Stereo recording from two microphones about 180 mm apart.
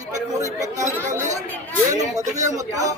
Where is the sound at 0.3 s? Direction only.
20° right (ahead or behind).